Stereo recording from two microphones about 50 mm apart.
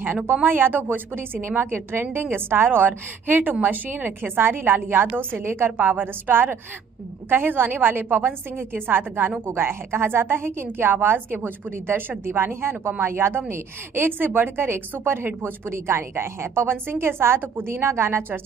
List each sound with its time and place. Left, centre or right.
0.2 s a woman's voice: right
5.3 s a woman's voice: right
5.8 s a woman's voice: right